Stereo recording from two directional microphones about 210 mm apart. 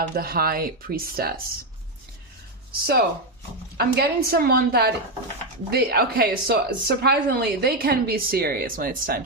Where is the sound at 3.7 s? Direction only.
50° right (ahead or behind).